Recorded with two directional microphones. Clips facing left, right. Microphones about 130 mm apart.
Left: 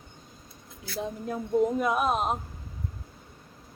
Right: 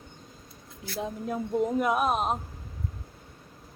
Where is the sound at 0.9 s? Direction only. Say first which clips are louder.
Right 1 dB; centre (ahead or behind).